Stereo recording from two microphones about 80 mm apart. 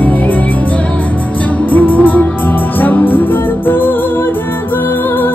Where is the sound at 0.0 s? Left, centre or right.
Left.